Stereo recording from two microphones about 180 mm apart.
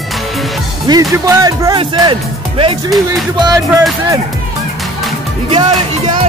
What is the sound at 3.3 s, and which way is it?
Speech, 20° right (ahead or behind).